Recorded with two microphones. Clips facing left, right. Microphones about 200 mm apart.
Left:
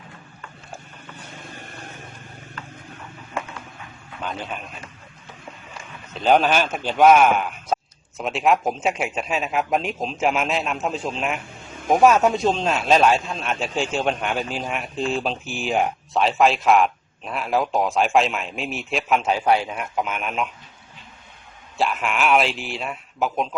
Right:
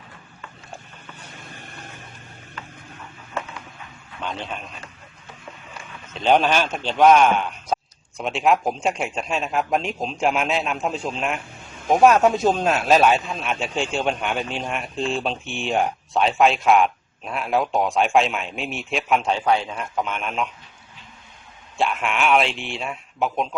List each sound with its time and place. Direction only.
4.2 s a man's voice: 5° left (ahead or behind)
6.1 s a man's voice: centre (ahead or behind)
21.8 s speech: centre (ahead or behind)